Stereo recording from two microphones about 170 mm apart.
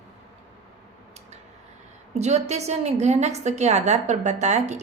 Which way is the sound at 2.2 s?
40° right (ahead or behind).